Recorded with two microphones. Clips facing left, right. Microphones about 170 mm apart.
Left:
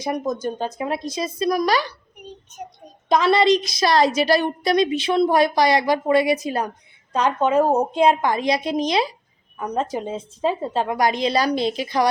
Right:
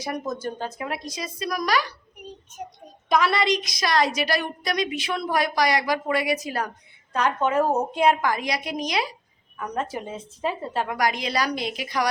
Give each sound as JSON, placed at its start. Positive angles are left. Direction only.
{"t": 0.0, "sound": "a woman's voice", "side_deg": 20}
{"t": 3.1, "sound": "a woman's voice", "side_deg": 25}